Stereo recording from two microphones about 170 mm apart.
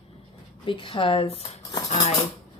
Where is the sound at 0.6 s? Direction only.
30° left (ahead or behind).